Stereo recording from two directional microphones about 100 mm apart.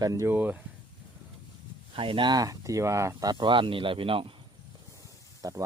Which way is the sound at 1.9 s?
65° right (ahead or behind).